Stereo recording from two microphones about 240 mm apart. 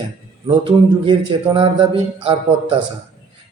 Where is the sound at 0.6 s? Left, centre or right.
Centre.